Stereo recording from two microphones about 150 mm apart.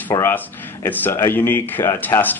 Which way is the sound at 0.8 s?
15° left (ahead or behind).